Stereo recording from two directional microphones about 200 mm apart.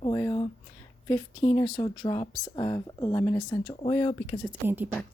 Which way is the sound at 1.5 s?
20° left (ahead or behind).